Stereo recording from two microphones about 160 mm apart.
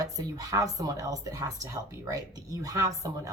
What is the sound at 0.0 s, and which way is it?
Speech, 20° right (ahead or behind).